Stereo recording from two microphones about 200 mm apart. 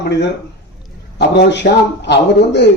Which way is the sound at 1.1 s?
60° left (ahead or behind).